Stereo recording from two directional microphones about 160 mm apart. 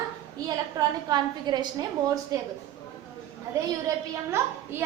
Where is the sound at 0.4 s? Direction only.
25° right (ahead or behind).